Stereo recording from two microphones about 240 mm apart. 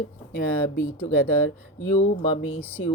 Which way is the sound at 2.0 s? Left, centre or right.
Left.